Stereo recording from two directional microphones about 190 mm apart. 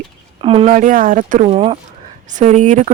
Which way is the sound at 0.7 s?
45° right (ahead or behind).